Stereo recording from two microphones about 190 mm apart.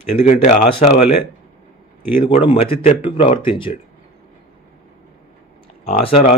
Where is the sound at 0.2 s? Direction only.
40° left (ahead or behind).